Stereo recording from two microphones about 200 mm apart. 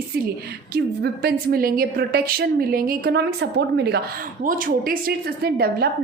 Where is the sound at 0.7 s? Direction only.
50° right (ahead or behind).